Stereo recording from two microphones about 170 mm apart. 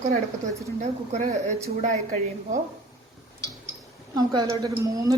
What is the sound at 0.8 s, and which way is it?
Speech, 45° right (ahead or behind).